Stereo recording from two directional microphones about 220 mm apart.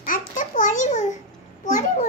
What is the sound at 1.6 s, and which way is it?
Speech, 35° left (ahead or behind).